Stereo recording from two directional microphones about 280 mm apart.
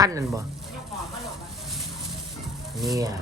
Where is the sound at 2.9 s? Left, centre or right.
Centre.